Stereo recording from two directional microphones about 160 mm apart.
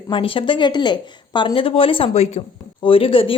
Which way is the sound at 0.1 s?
35° left (ahead or behind).